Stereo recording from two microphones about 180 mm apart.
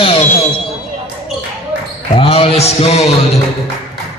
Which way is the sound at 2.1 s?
30° left (ahead or behind).